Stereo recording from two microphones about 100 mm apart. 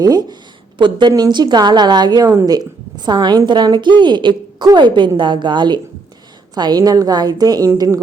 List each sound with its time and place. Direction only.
0.0 s a woman's voice: 40° right (ahead or behind)